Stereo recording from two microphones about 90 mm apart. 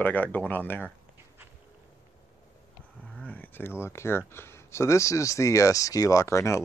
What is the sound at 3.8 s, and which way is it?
Speech, 30° left (ahead or behind).